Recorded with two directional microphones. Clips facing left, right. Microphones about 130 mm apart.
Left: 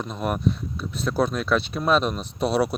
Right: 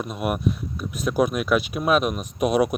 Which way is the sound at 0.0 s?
10° right (ahead or behind).